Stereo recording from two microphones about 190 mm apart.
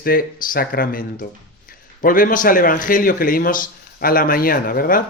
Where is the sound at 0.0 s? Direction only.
50° left (ahead or behind).